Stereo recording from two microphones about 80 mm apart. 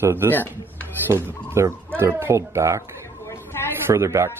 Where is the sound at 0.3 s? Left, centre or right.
Left.